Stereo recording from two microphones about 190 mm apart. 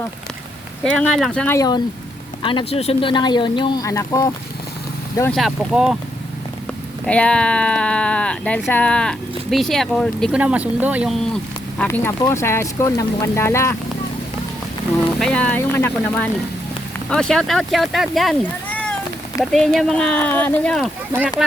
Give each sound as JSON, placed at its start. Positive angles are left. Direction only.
{"t": 1.0, "sound": "speech", "side_deg": 5}
{"t": 1.5, "sound": "speech", "side_deg": 20}
{"t": 5.3, "sound": "speech", "side_deg": 0}
{"t": 7.0, "sound": "speech", "side_deg": 5}
{"t": 11.8, "sound": "speech", "side_deg": 10}
{"t": 15.2, "sound": "speech", "side_deg": 5}